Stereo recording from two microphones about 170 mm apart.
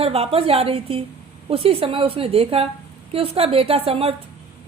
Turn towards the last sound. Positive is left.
turn(degrees=-35)  # may be behind; listen again after turning